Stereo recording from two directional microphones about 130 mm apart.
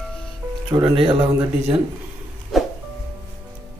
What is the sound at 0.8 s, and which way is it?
Speech, 40° right (ahead or behind).